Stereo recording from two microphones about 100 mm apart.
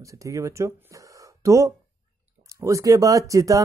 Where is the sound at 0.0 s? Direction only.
30° right (ahead or behind).